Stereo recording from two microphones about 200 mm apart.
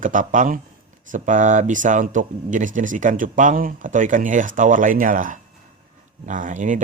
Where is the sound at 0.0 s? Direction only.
40° right (ahead or behind).